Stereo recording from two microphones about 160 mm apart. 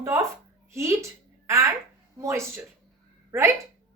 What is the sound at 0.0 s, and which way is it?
A woman's voice, 20° right (ahead or behind).